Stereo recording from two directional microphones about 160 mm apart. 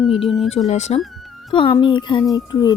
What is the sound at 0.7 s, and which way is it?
Speech, 45° left (ahead or behind).